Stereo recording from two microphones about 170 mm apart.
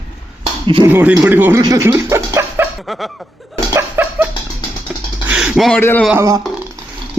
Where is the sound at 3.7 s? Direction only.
10° right (ahead or behind).